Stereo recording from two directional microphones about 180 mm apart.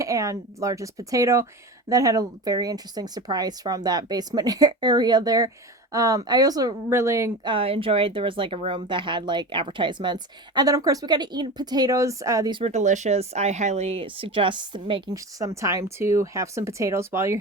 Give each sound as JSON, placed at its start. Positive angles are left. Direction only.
{"t": 0.0, "sound": "speech", "side_deg": -15}
{"t": 7.5, "sound": "speech", "side_deg": -30}
{"t": 12.7, "sound": "speech", "side_deg": -40}